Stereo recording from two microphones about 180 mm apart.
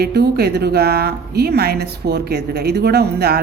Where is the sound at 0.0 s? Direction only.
60° right (ahead or behind).